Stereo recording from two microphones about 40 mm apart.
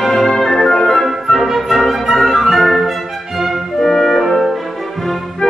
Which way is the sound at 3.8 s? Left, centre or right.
Centre.